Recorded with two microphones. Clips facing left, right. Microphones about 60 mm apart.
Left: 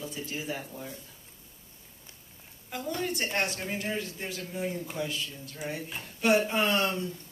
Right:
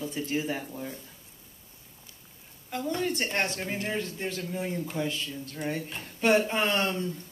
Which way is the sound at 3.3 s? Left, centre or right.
Right.